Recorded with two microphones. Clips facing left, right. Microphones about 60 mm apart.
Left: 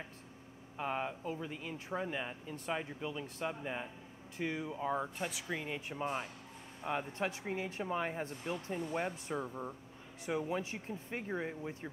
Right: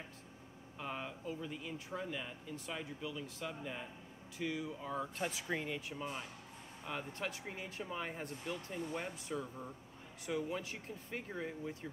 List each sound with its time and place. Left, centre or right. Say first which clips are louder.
0.7 s speech: left 6 dB; left
5.2 s speech: even; centre
5.8 s speech: left 5 dB; left